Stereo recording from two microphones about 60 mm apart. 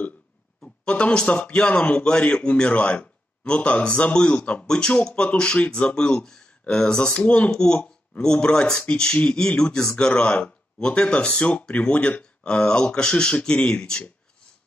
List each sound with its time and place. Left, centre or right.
0.6 s a man's voice: centre